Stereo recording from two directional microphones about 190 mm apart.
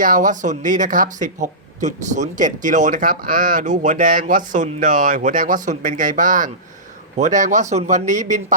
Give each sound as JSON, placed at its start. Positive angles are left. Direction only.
{"t": 0.0, "sound": "speech", "side_deg": -45}